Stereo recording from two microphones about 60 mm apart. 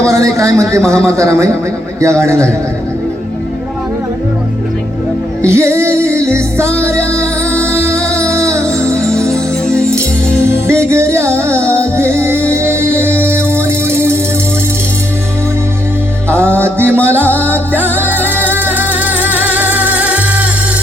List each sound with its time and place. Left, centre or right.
0.0 s a sound: right
0.9 s a man's voice: right
5.5 s music: right
9.0 s music: centre
10.7 s music: right
16.6 s music: right